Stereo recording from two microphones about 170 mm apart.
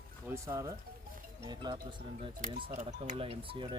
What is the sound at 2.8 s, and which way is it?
Speech, 45° right (ahead or behind).